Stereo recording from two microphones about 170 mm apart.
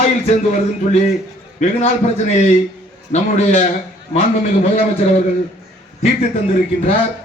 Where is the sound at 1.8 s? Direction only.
40° left (ahead or behind).